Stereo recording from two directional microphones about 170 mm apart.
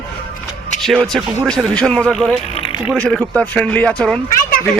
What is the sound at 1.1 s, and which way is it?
A man's voice, centre (ahead or behind).